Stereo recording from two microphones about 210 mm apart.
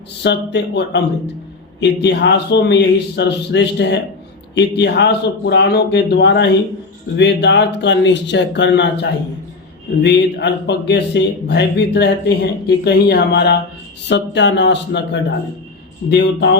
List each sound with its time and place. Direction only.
0.2 s a man's voice: 55° left (ahead or behind)